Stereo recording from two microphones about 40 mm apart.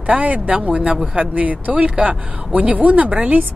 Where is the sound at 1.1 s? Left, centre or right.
Right.